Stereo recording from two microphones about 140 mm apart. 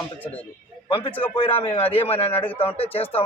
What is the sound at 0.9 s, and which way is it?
A man's voice, 40° left (ahead or behind).